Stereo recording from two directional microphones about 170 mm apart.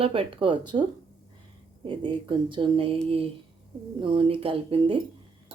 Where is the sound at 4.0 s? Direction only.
30° right (ahead or behind).